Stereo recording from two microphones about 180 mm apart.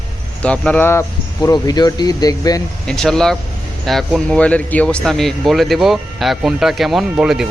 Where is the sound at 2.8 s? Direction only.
5° left (ahead or behind).